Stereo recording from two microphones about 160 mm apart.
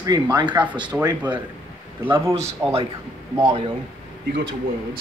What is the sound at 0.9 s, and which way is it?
Speech, 10° right (ahead or behind).